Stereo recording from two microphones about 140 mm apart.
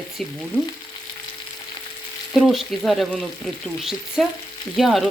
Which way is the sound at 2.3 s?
Centre (ahead or behind).